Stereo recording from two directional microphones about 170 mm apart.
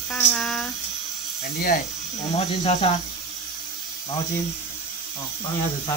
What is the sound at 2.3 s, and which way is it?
Speech, 40° left (ahead or behind).